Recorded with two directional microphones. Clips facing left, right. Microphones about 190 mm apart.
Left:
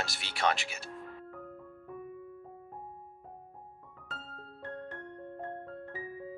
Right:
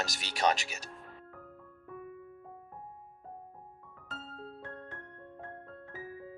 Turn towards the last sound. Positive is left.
turn(degrees=0)  # may be behind; listen again after turning